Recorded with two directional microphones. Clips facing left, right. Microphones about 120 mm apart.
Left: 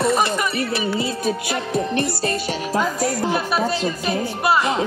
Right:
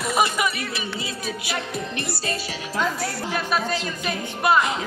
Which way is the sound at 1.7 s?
45° left (ahead or behind).